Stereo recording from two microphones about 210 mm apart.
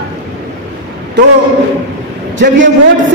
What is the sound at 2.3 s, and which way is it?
Speech, 60° right (ahead or behind).